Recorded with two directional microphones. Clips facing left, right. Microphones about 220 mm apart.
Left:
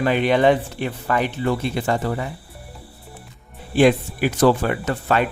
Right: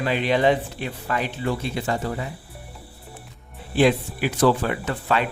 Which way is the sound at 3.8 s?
50° left (ahead or behind).